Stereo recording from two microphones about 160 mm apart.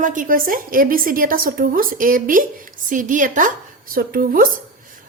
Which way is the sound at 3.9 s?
65° right (ahead or behind).